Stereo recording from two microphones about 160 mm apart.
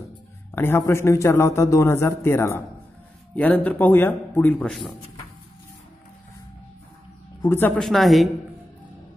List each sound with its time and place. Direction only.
0.6 s a man's voice: 15° left (ahead or behind)
7.4 s a man's voice: 15° left (ahead or behind)
7.7 s a woman's voice: centre (ahead or behind)